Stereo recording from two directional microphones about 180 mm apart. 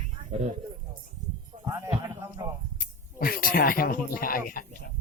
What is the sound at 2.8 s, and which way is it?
Speech, 55° left (ahead or behind).